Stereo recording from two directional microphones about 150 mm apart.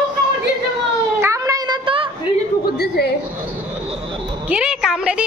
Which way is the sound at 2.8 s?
90° left.